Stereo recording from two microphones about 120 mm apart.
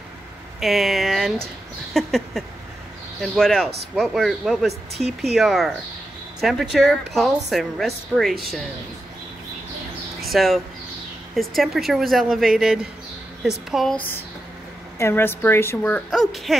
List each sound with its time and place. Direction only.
0.6 s a woman's voice: centre (ahead or behind)
10.3 s a woman's voice: centre (ahead or behind)
13.9 s a woman's voice: 15° left (ahead or behind)
16.1 s a woman's voice: centre (ahead or behind)